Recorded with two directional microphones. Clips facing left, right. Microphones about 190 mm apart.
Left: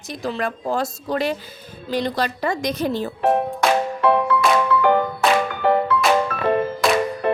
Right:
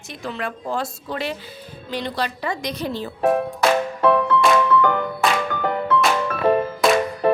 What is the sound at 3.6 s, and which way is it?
Music, centre (ahead or behind).